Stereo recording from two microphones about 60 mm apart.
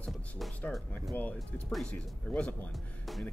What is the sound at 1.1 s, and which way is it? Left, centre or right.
Speech, left.